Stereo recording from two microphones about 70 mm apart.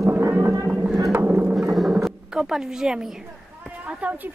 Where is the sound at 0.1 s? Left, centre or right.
Right.